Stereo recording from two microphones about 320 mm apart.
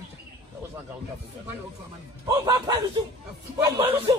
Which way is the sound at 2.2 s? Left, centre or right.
Centre.